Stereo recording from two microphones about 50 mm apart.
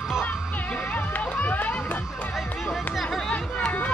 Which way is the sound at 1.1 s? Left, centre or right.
Left.